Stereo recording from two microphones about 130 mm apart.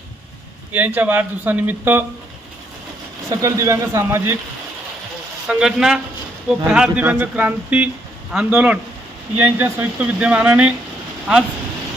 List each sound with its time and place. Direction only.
0.7 s speech: 15° right (ahead or behind)
3.2 s speech: 25° right (ahead or behind)
5.5 s a man's voice: 5° right (ahead or behind)